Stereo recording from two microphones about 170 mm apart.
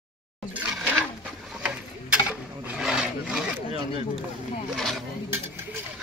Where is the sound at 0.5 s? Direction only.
10° right (ahead or behind).